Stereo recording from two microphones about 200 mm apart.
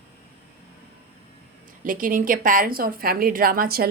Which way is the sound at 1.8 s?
45° right (ahead or behind).